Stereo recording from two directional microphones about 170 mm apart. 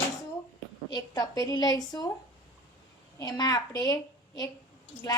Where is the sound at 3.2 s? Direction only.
20° left (ahead or behind).